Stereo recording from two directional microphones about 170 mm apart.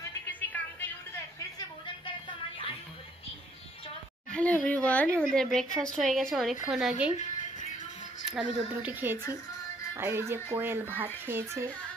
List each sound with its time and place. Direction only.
0.3 s music: 10° left (ahead or behind)
4.3 s a woman's voice: 5° left (ahead or behind)
7.2 s music: 45° left (ahead or behind)
8.2 s speech: 5° right (ahead or behind)